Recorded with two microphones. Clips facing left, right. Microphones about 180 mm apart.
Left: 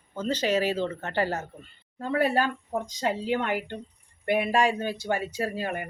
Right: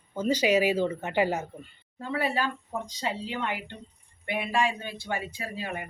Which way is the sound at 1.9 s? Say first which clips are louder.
Left 4 dB; 50° left (ahead or behind).